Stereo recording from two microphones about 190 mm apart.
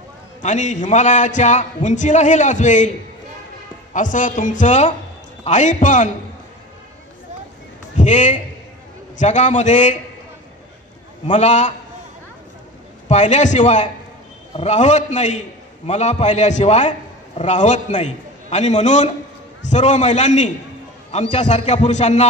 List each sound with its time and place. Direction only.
0.4 s a man's voice: 40° left (ahead or behind)
3.9 s a man's voice: 40° left (ahead or behind)
7.9 s a man's voice: 40° left (ahead or behind)
11.2 s a man's voice: 40° left (ahead or behind)
13.1 s a man's voice: 40° left (ahead or behind)